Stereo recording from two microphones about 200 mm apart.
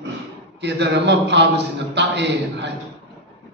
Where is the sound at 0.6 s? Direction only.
60° right (ahead or behind).